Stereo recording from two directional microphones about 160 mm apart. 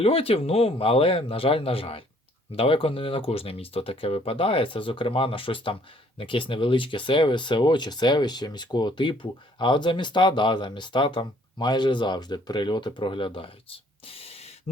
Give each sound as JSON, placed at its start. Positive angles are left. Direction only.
{"t": 0.0, "sound": "speech", "side_deg": 35}